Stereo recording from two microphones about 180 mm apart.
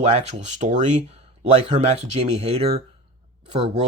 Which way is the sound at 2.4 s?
35° right (ahead or behind).